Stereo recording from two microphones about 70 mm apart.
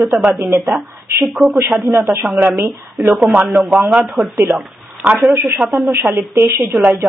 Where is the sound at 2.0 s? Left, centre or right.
Right.